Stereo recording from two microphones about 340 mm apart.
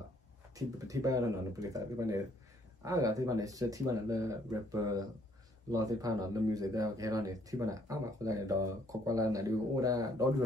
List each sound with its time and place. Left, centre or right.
0.6 s speech: centre